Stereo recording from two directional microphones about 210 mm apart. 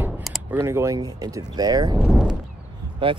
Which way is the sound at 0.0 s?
5° right (ahead or behind).